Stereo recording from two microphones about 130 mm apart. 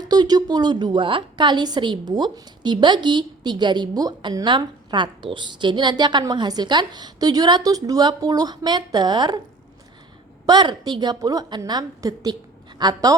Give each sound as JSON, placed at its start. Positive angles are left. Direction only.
{"t": 0.0, "sound": "a woman's voice", "side_deg": -30}
{"t": 10.4, "sound": "a woman's voice", "side_deg": -35}